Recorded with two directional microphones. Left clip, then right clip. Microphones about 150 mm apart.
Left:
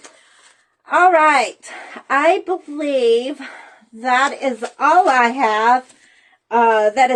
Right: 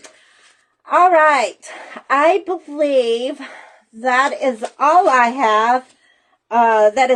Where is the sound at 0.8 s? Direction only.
25° right (ahead or behind).